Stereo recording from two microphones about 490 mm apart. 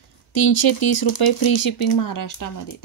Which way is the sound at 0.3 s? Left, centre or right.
Left.